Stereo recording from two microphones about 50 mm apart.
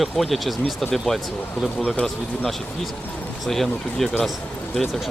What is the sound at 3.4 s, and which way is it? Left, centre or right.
Speech, centre.